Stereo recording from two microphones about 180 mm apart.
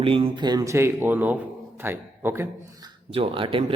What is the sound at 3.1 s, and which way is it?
Speech, 30° right (ahead or behind).